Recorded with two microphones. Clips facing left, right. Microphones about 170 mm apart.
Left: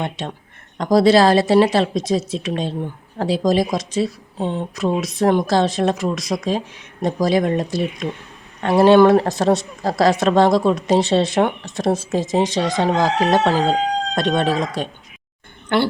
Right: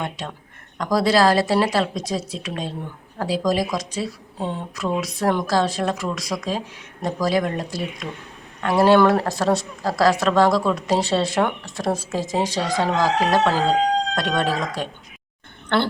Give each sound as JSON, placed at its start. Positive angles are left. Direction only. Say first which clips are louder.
{"t": 0.0, "sound": "a woman's voice", "louder": "left 4 dB", "side_deg": 25}